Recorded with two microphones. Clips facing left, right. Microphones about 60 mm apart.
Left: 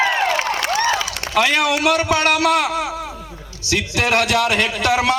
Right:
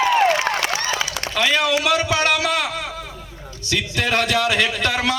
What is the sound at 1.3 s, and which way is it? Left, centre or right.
A man's voice, left.